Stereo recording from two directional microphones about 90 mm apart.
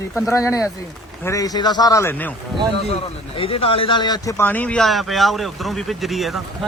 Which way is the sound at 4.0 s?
50° left (ahead or behind).